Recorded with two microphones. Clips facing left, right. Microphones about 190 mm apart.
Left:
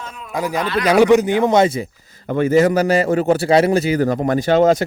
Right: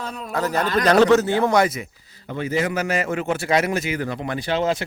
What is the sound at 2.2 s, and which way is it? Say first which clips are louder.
A man's voice: left 9 dB; 50° left (ahead or behind).